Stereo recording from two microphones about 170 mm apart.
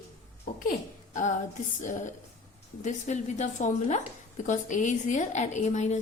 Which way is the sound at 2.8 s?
45° left (ahead or behind).